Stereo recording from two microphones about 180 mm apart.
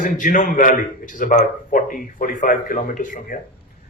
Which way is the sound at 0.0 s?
45° left (ahead or behind).